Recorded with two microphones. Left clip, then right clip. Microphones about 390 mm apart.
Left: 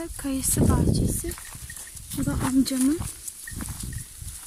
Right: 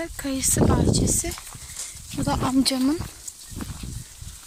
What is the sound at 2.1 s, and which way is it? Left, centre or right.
Speech, centre.